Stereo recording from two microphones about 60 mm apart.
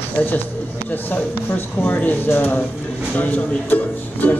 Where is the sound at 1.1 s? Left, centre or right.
Left.